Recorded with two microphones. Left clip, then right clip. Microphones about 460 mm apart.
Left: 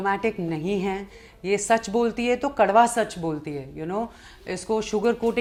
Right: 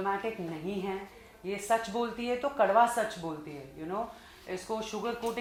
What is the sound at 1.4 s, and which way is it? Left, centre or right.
Speech, left.